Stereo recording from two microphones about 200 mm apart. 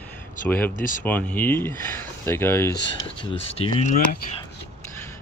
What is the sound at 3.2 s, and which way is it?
Speech, 25° left (ahead or behind).